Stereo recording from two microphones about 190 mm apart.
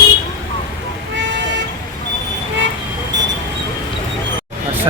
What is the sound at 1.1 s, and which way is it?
Vehicle, 70° right (ahead or behind).